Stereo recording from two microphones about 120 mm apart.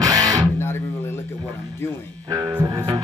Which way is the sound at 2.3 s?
35° right (ahead or behind).